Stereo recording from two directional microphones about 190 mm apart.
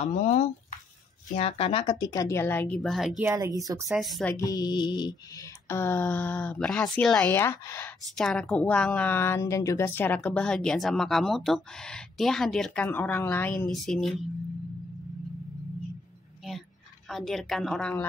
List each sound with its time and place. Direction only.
0.0 s speech: 35° left (ahead or behind); by 3.3 s centre (ahead or behind)
3.3 s speech: 20° right (ahead or behind)
4.0 s a woman's voice: 5° left (ahead or behind)
17.1 s a woman's voice: centre (ahead or behind)